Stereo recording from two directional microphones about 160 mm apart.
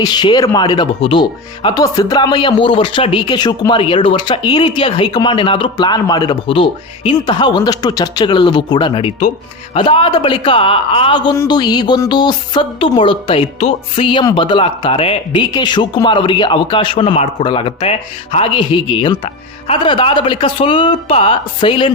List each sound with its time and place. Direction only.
0.0 s speech: 25° left (ahead or behind)